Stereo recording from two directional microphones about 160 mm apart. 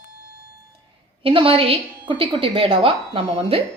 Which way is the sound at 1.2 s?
35° right (ahead or behind).